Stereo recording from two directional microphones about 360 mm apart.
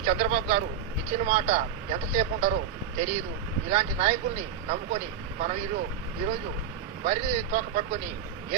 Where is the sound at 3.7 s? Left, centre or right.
Centre.